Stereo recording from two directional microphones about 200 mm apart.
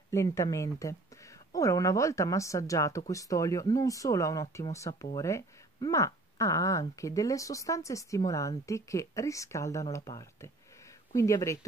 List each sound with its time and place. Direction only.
0.1 s speech: 15° left (ahead or behind)